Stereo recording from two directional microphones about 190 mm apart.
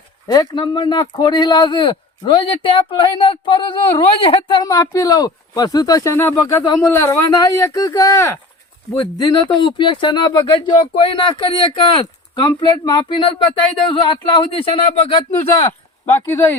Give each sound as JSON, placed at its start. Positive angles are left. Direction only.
{"t": 0.3, "sound": "speech", "side_deg": 20}
{"t": 16.1, "sound": "speech", "side_deg": 10}